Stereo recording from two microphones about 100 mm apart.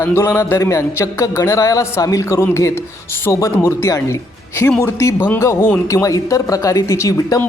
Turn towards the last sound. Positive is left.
turn(degrees=35)  # may be behind; listen again after turning